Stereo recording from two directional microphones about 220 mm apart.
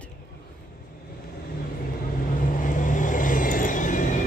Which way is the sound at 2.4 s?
35° left (ahead or behind).